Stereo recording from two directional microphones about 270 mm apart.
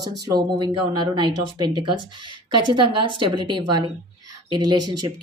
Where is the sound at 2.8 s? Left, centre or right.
Centre.